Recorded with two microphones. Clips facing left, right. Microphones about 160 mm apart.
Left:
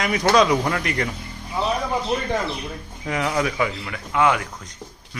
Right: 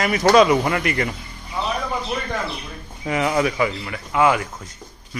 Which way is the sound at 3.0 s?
5° right (ahead or behind).